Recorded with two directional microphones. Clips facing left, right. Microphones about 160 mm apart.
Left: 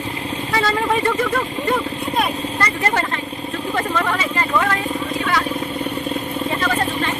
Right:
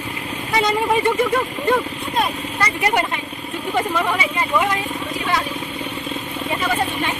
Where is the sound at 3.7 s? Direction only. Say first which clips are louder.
Right 1 dB; 10° right (ahead or behind).